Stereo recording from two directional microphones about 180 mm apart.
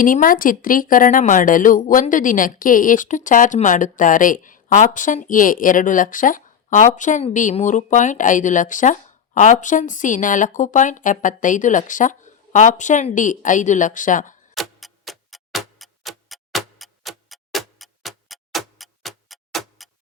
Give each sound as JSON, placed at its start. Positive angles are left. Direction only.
{"t": 0.0, "sound": "a woman's voice", "side_deg": 50}
{"t": 14.5, "sound": "tick-tock", "side_deg": 0}